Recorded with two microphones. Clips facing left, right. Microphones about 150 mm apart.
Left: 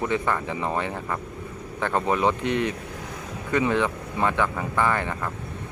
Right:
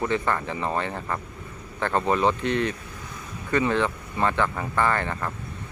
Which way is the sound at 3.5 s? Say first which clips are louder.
Even; 15° left (ahead or behind).